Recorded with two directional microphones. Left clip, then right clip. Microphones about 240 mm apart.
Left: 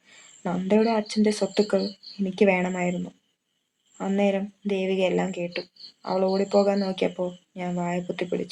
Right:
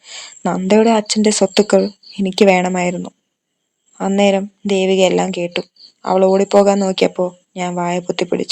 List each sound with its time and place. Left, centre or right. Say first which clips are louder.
0.0 s speech: right 12 dB; right